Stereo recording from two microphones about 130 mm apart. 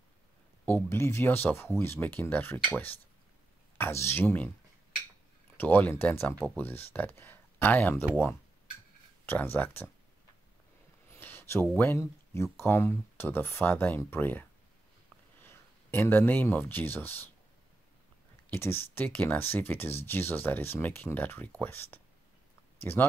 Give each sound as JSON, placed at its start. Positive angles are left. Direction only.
{"t": 0.8, "sound": "speech", "side_deg": 20}
{"t": 5.6, "sound": "speech", "side_deg": 15}
{"t": 9.2, "sound": "speech", "side_deg": 15}
{"t": 11.1, "sound": "a sound", "side_deg": 15}
{"t": 12.5, "sound": "speech", "side_deg": 20}
{"t": 15.4, "sound": "speech", "side_deg": 15}
{"t": 18.5, "sound": "speech", "side_deg": 20}